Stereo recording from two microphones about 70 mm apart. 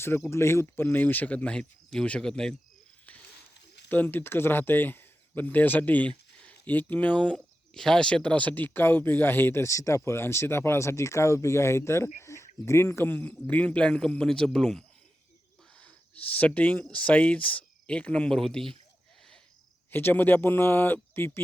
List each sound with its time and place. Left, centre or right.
0.3 s speech: left; by 2.6 s centre
3.8 s speech: left
7.3 s speech: centre
15.8 s speech: left
19.9 s speech: left